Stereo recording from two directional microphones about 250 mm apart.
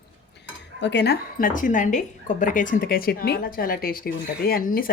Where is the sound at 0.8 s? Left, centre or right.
Left.